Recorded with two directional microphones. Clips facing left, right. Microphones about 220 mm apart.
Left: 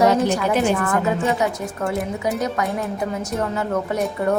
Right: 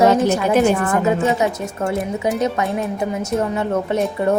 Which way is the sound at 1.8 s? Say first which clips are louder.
Right 3 dB; centre (ahead or behind).